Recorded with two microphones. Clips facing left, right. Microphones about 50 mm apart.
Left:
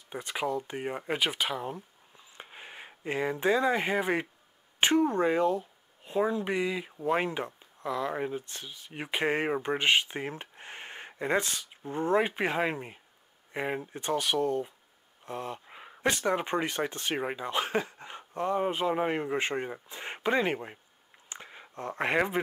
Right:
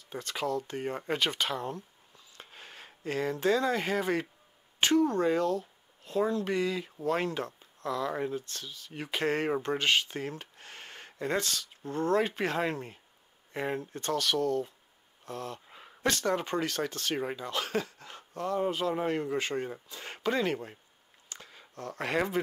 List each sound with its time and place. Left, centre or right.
0.1 s speech: centre
2.1 s a sound: left
4.7 s speech: left